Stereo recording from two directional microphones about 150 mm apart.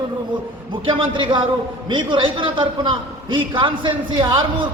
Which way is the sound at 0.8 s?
35° right (ahead or behind).